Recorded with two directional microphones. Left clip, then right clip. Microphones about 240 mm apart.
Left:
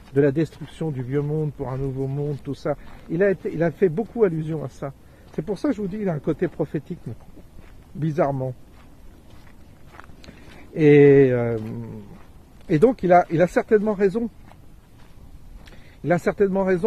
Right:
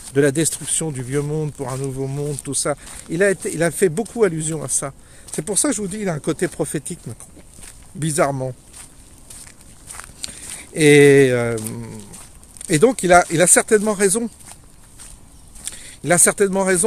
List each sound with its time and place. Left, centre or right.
0.1 s speech: centre
8.0 s speech: centre
9.9 s a sound: centre
12.6 s speech: centre
15.6 s speech: centre